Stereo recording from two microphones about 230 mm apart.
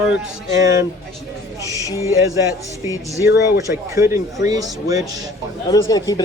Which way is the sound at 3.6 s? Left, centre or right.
Centre.